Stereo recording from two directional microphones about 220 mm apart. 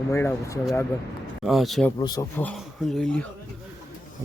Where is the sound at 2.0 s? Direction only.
20° left (ahead or behind).